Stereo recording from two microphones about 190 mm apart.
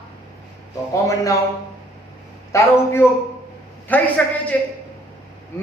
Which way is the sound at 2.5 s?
15° left (ahead or behind).